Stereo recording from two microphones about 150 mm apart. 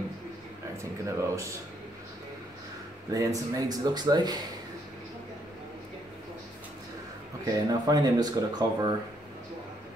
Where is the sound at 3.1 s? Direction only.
20° right (ahead or behind).